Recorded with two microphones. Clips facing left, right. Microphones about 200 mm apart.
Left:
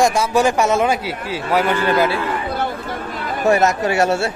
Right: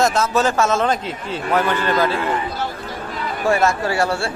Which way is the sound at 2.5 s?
55° left (ahead or behind).